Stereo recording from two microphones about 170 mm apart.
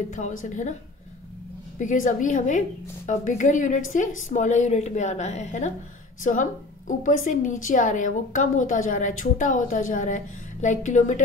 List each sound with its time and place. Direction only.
0.1 s a woman's voice: 50° left (ahead or behind)
1.8 s a woman's voice: 50° left (ahead or behind)